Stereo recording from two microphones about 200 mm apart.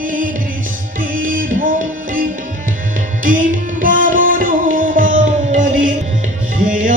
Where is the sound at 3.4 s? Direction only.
40° right (ahead or behind).